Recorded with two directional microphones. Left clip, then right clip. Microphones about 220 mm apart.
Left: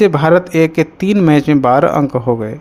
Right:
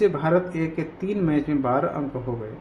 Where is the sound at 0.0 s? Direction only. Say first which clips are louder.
Left 10 dB; 45° left (ahead or behind).